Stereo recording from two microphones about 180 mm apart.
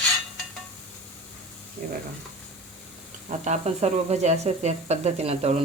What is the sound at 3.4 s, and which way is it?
Speech, 40° right (ahead or behind).